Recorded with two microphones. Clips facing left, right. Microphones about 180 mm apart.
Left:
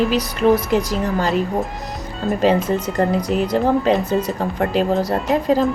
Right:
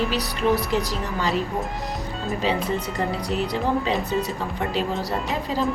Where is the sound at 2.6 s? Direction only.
45° left (ahead or behind).